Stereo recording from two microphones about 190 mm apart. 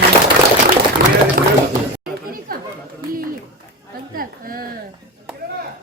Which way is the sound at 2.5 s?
50° right (ahead or behind).